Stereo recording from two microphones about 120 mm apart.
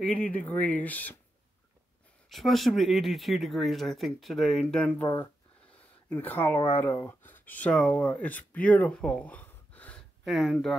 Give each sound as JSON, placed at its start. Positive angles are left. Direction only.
{"t": 0.0, "sound": "speech", "side_deg": 10}
{"t": 2.2, "sound": "speech", "side_deg": 0}
{"t": 8.5, "sound": "a sound", "side_deg": 10}
{"t": 10.2, "sound": "speech", "side_deg": 0}